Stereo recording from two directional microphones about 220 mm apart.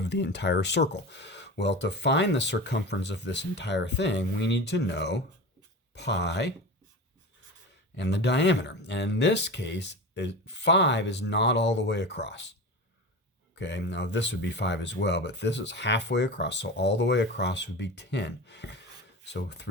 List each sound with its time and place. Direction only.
0.0 s speech: 50° left (ahead or behind)
7.9 s speech: 50° left (ahead or behind)
13.6 s speech: 50° left (ahead or behind)